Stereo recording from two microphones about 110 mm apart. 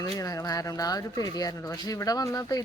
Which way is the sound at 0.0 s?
30° left (ahead or behind).